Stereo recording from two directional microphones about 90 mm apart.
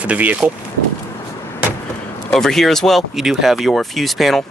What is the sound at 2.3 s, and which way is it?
Speech, 5° left (ahead or behind).